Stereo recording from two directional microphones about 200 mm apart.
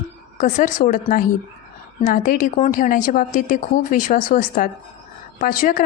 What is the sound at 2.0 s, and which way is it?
Speech, 40° left (ahead or behind).